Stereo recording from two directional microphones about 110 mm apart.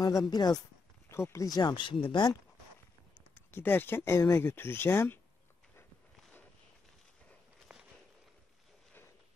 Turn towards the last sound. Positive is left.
turn(degrees=-5)  # may be behind; listen again after turning